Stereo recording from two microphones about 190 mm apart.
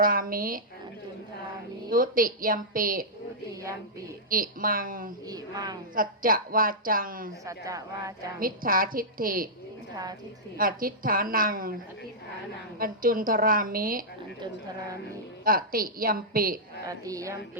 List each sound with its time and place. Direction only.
0.0 s speech: 50° right (ahead or behind)
1.9 s speech: 50° right (ahead or behind)
4.3 s speech: 50° right (ahead or behind)
5.2 s speech: 20° right (ahead or behind)
5.9 s speech: 45° right (ahead or behind)
7.4 s speech: 15° right (ahead or behind)
8.4 s speech: 50° right (ahead or behind)
9.9 s speech: 20° right (ahead or behind)
10.6 s speech: 50° right (ahead or behind)
12.8 s speech: 50° right (ahead or behind)
14.3 s speech: 25° right (ahead or behind)
15.4 s speech: 50° right (ahead or behind)
16.8 s speech: 20° right (ahead or behind)